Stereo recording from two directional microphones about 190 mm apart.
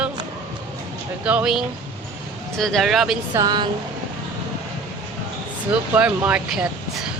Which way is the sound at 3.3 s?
20° right (ahead or behind).